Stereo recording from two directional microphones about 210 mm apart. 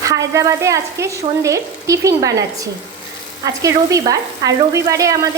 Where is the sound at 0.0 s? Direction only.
15° right (ahead or behind).